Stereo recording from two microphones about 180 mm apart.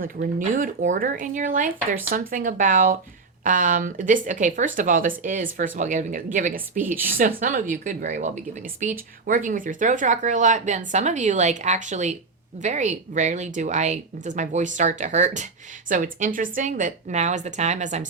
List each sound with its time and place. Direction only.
0.0 s speech: 50° right (ahead or behind)